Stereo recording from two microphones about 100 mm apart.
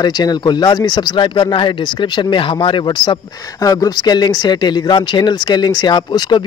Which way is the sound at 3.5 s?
40° left (ahead or behind).